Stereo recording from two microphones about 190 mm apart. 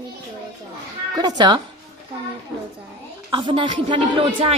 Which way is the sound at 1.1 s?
20° right (ahead or behind).